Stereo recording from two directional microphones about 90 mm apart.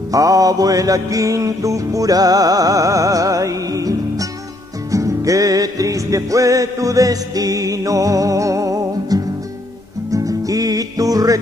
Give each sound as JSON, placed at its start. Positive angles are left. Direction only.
{"t": 0.1, "sound": "music", "side_deg": -40}